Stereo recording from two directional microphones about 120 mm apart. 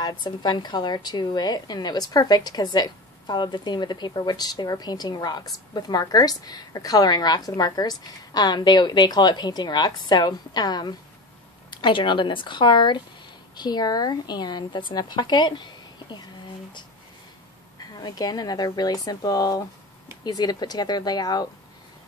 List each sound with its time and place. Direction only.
0.0 s a woman's voice: 40° left (ahead or behind)
17.9 s a woman's voice: 35° left (ahead or behind)